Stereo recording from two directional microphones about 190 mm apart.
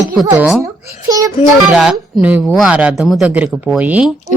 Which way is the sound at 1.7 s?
5° right (ahead or behind).